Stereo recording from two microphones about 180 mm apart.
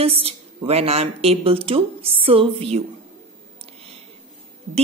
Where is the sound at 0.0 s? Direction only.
35° right (ahead or behind).